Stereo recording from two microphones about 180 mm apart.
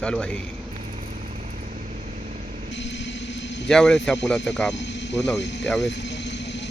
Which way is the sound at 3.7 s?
5° left (ahead or behind).